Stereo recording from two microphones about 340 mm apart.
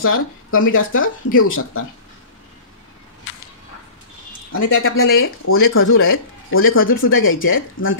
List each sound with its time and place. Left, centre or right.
0.0 s speech: left
3.3 s a sound: left
4.6 s speech: left